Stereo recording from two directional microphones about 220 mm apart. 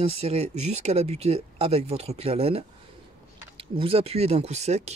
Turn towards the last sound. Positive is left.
turn(degrees=-30)  # may be behind; listen again after turning